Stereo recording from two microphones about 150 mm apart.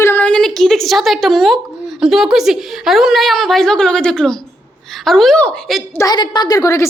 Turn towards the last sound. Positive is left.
turn(degrees=20)  # may be behind; listen again after turning